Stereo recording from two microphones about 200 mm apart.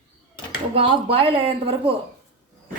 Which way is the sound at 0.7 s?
30° right (ahead or behind).